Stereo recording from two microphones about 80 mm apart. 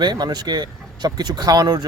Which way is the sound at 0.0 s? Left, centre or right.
Right.